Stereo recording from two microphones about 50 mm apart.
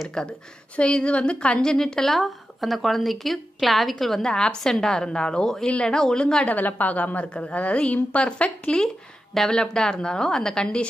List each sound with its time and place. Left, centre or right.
0.1 s a woman's voice: centre
2.1 s a woman's voice: centre
4.3 s a woman's voice: centre
6.4 s a woman's voice: left
8.8 s a woman's voice: centre